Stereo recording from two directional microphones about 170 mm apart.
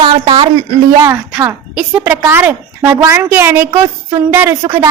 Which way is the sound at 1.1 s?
10° right (ahead or behind).